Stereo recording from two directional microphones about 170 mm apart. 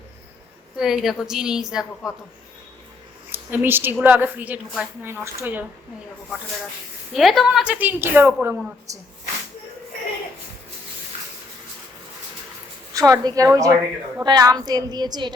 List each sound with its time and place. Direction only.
0.8 s a woman's voice: 5° right (ahead or behind)
3.3 s a woman's voice: 10° right (ahead or behind)
7.1 s a woman's voice: centre (ahead or behind)
12.9 s a woman's voice: 20° right (ahead or behind)